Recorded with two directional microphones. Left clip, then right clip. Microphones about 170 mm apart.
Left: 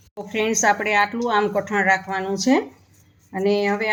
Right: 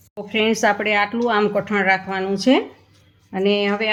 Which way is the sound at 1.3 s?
40° right (ahead or behind).